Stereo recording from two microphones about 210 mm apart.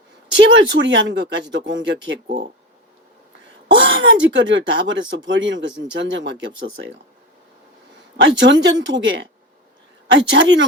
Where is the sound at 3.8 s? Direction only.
60° right (ahead or behind).